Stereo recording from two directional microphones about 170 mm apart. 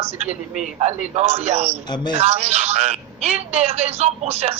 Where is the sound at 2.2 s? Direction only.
40° right (ahead or behind).